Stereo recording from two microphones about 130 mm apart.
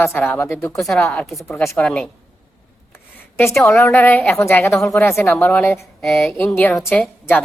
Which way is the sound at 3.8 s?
15° left (ahead or behind).